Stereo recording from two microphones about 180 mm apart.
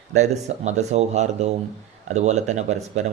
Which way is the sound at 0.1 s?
40° right (ahead or behind).